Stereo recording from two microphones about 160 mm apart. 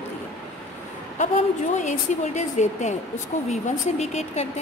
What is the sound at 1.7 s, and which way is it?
A woman's voice, 45° left (ahead or behind).